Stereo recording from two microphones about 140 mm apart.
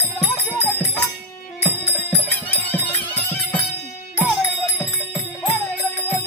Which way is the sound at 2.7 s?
15° left (ahead or behind).